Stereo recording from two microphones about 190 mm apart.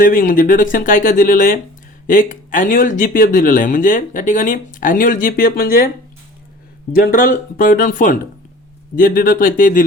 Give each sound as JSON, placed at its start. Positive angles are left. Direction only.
{"t": 0.0, "sound": "speech", "side_deg": 45}
{"t": 6.9, "sound": "speech", "side_deg": 50}